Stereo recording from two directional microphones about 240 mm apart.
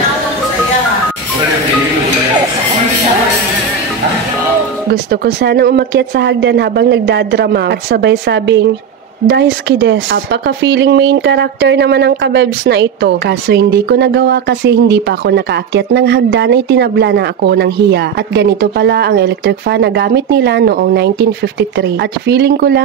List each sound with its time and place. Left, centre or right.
4.9 s speech: right